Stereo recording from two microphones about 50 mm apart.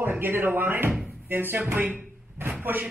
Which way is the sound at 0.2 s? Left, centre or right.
Right.